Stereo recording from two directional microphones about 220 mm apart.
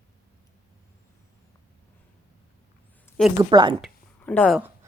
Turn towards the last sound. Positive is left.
turn(degrees=5)  # may be behind; listen again after turning